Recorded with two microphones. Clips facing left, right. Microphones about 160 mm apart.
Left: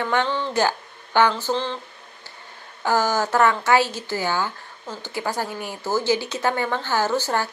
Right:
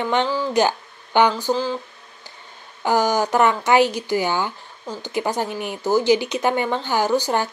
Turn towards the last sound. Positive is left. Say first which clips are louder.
# right 3 dB
turn(degrees=-15)  # may be behind; listen again after turning